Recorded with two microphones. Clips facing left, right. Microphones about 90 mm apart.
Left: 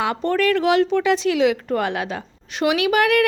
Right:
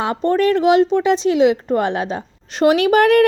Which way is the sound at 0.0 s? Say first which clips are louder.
Right 3 dB; 25° right (ahead or behind).